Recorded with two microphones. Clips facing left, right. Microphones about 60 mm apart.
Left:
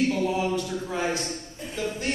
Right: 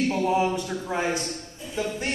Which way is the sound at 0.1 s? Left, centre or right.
Right.